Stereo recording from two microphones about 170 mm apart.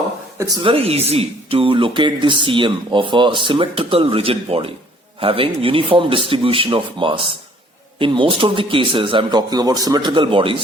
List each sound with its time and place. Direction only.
0.6 s a man's voice: 35° right (ahead or behind)